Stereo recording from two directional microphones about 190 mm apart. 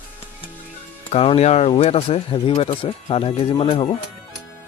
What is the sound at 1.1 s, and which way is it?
Speech, 30° left (ahead or behind).